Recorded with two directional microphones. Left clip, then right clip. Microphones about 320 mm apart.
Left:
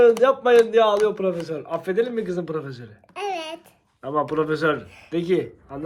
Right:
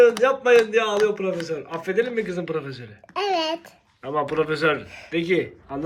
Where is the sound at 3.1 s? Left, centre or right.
Right.